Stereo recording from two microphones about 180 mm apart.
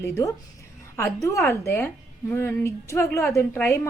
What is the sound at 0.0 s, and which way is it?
A woman's voice, 15° left (ahead or behind).